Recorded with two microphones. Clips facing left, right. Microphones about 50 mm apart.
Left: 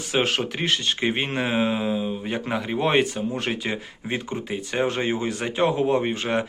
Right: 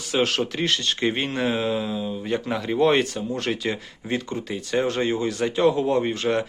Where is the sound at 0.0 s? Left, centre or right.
Left.